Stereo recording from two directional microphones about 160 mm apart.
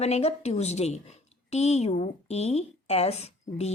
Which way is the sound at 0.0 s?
40° left (ahead or behind).